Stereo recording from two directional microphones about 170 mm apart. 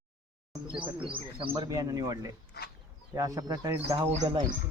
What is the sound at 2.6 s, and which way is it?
Duck, 75° left (ahead or behind).